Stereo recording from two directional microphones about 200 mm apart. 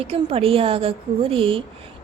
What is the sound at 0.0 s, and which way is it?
A woman's voice, 30° right (ahead or behind).